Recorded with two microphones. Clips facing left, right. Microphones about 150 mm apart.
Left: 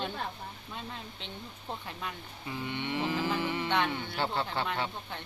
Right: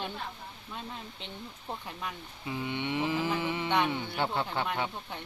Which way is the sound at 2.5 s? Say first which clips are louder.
Right 2 dB; 15° right (ahead or behind).